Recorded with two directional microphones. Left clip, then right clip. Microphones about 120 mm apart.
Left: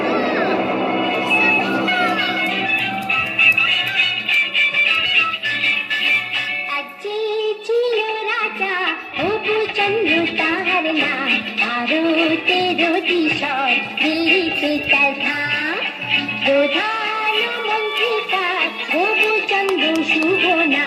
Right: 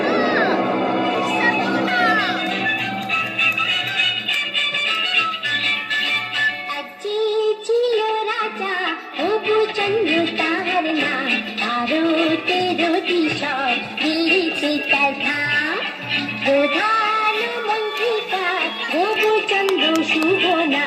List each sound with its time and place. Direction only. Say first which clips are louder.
0.0 s a sound: right 1 dB; 45° right (ahead or behind)
0.7 s music: left 1 dB; 25° right (ahead or behind)
1.9 s music: right 2 dB; 50° right (ahead or behind)
3.1 s music: left 5 dB; 25° right (ahead or behind)
7.9 s child singing: even; 30° right (ahead or behind)
9.2 s music: right 1 dB; 30° right (ahead or behind)
16.1 s music: left 2 dB; 40° right (ahead or behind)